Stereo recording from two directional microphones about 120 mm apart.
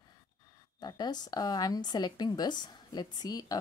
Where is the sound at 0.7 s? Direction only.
35° left (ahead or behind).